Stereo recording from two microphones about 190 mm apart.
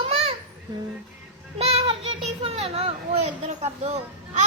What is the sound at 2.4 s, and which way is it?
Speech, 30° right (ahead or behind).